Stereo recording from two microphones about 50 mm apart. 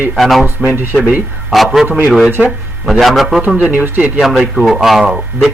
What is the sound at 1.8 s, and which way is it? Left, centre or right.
Speech, right.